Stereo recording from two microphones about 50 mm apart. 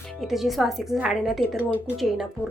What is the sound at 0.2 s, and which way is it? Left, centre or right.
Speech, centre.